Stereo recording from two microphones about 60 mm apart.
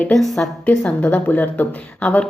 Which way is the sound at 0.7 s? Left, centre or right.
Left.